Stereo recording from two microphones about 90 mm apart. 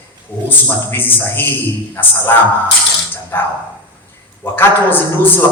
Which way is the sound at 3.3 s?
25° left (ahead or behind).